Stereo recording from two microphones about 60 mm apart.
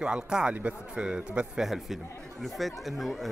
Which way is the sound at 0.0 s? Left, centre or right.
Centre.